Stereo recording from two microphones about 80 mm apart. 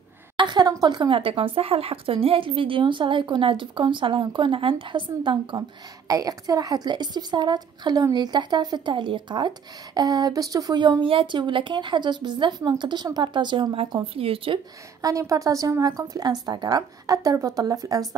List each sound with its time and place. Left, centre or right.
0.4 s a woman's voice: right
6.0 s a woman's voice: right
9.9 s a woman's voice: right
10.8 s a woman's voice: right
15.0 s a woman's voice: right